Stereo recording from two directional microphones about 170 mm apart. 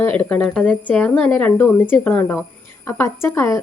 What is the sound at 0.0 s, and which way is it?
Speech, 10° left (ahead or behind).